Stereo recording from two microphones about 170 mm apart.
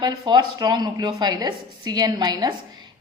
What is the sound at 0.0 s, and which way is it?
A woman's voice, 25° right (ahead or behind).